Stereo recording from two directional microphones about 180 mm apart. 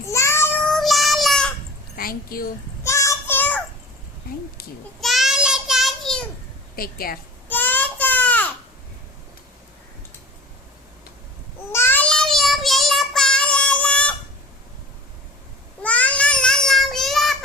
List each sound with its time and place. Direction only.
0.1 s child singing: 15° left (ahead or behind)
0.7 s child singing: centre (ahead or behind)
2.0 s a woman's voice: 55° left (ahead or behind)
2.8 s child singing: 15° left (ahead or behind)
4.9 s child singing: centre (ahead or behind)
6.7 s a woman's voice: 55° left (ahead or behind)
7.4 s baby cry: 10° left (ahead or behind)
11.7 s child singing: 15° left (ahead or behind)
15.8 s a sound: 10° left (ahead or behind)